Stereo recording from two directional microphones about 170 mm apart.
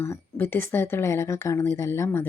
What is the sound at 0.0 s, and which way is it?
Speech, 15° left (ahead or behind).